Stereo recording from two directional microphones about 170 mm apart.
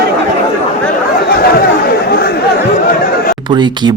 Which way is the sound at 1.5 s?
65° left (ahead or behind).